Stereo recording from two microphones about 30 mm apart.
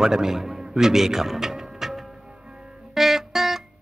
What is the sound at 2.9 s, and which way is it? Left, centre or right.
Music, centre.